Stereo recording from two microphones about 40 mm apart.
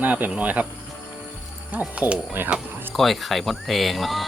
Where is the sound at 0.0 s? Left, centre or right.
Right.